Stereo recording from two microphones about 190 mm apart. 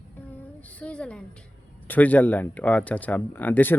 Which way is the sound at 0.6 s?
5° left (ahead or behind).